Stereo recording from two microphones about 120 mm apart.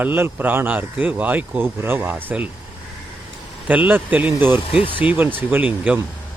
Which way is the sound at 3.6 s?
15° right (ahead or behind).